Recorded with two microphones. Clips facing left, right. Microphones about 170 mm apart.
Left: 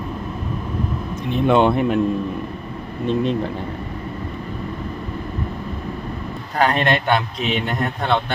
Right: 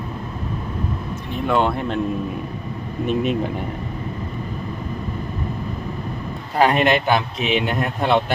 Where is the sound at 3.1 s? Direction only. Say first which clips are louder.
Left 1 dB; 10° right (ahead or behind).